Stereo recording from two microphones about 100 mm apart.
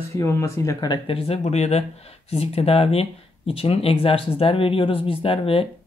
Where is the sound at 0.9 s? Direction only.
65° left (ahead or behind).